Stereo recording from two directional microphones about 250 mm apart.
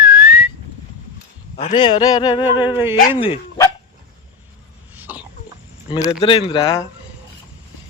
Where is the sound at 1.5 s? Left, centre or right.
Left.